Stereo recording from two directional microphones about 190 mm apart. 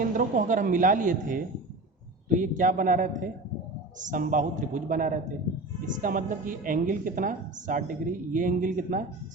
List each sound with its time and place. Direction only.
0.0 s speech: 45° right (ahead or behind)